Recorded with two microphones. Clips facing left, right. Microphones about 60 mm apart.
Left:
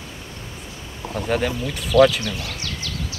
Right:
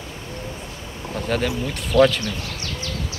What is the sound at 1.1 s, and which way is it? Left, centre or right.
Speech, centre.